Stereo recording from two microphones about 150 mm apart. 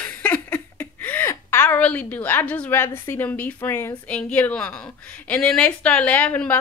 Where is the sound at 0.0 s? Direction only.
10° left (ahead or behind).